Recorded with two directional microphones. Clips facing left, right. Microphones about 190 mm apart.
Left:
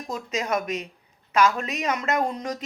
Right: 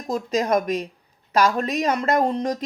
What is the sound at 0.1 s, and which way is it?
Speech, 35° right (ahead or behind).